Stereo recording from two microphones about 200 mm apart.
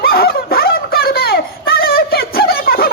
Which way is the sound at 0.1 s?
50° left (ahead or behind).